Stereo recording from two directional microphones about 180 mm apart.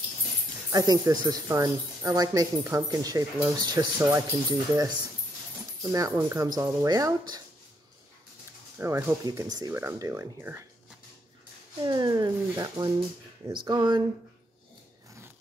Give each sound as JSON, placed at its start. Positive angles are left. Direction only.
{"t": 0.7, "sound": "speech", "side_deg": -20}
{"t": 8.7, "sound": "speech", "side_deg": -15}
{"t": 11.8, "sound": "speech", "side_deg": -25}